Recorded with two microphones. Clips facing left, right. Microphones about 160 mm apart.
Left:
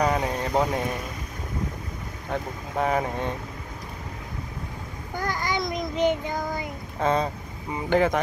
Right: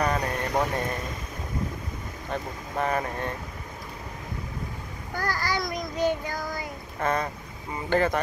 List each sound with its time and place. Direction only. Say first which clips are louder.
0.0 s a sound: left 2 dB; 15° left (ahead or behind)
2.3 s speech: left 2 dB; 15° left (ahead or behind)
5.1 s a child's voice: left 1 dB; 20° left (ahead or behind)